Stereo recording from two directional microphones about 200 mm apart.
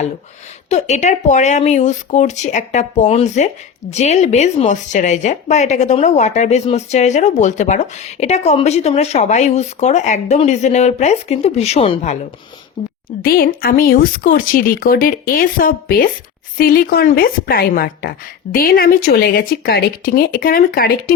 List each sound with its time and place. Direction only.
0.7 s speech: 35° left (ahead or behind)
13.1 s speech: 50° left (ahead or behind)